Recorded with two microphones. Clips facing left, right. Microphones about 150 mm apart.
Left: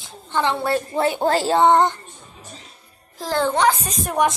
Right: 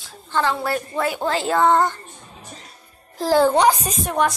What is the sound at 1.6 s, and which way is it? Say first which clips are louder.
Speech: left 1 dB; 20° left (ahead or behind).